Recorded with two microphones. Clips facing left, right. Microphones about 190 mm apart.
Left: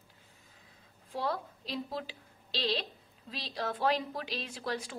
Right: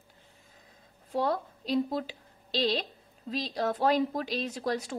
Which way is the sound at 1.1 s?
45° right (ahead or behind).